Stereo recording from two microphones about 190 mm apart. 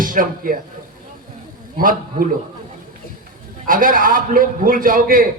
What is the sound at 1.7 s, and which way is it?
Speech, 45° right (ahead or behind).